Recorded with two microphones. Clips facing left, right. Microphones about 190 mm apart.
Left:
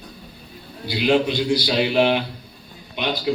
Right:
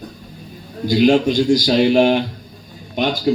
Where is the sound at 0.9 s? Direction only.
45° right (ahead or behind).